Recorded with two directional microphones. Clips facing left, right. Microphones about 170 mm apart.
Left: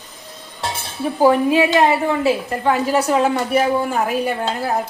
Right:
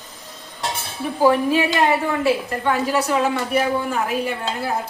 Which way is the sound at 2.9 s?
40° left (ahead or behind).